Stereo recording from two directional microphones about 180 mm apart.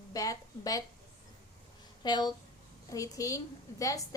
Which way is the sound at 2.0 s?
25° left (ahead or behind).